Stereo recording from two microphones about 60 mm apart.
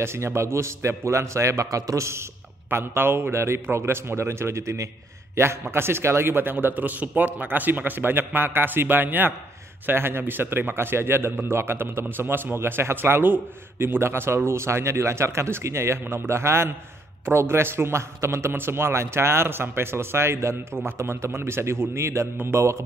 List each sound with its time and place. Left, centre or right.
0.0 s a man's voice: right
2.7 s a man's voice: right